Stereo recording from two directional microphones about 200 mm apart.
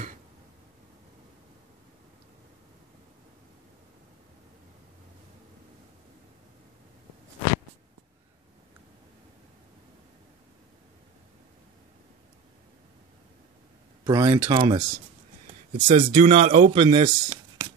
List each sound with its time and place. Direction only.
14.0 s a man's voice: 15° right (ahead or behind)